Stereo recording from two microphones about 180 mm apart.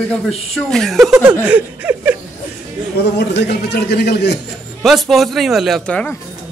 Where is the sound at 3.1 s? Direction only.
70° left (ahead or behind).